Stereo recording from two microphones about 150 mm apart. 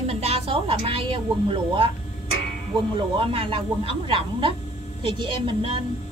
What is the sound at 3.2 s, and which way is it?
A woman's voice, 35° right (ahead or behind).